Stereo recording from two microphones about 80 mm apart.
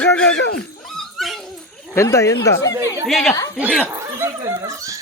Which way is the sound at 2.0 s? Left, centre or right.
Left.